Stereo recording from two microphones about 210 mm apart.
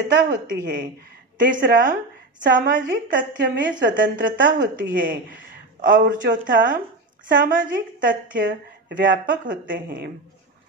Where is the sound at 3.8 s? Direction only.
60° right (ahead or behind).